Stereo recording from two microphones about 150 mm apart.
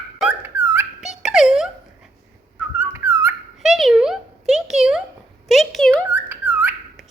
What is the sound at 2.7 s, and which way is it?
Dog, 15° right (ahead or behind).